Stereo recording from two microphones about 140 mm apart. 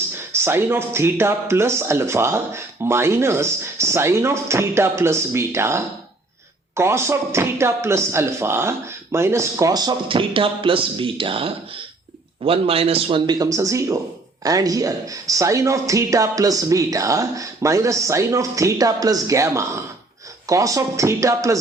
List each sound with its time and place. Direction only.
0.3 s a man's voice: 15° right (ahead or behind); by 13.3 s 40° right (ahead or behind)
13.4 s speech: 25° right (ahead or behind)